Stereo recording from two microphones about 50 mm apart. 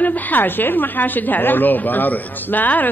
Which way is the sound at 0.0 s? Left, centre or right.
Left.